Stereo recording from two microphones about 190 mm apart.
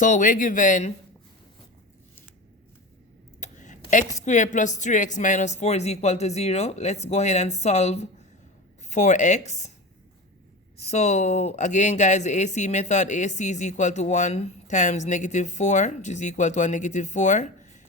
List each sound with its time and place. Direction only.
0.0 s speech: 45° left (ahead or behind)
3.4 s speech: 40° left (ahead or behind)
10.8 s speech: 35° left (ahead or behind)